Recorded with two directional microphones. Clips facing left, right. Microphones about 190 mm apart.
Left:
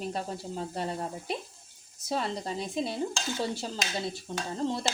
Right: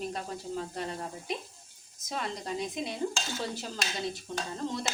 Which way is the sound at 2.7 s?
30° left (ahead or behind).